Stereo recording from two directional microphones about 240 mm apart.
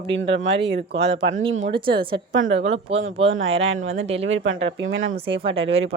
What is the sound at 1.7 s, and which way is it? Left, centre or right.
Speech, right.